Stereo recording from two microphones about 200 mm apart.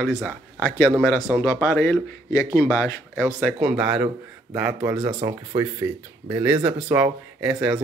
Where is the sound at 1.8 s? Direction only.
15° left (ahead or behind).